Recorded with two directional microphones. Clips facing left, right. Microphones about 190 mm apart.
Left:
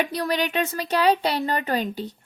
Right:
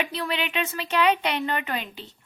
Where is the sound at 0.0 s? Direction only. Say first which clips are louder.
Left 4 dB; 40° left (ahead or behind).